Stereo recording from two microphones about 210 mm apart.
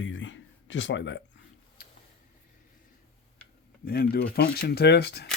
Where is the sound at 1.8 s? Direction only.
45° left (ahead or behind).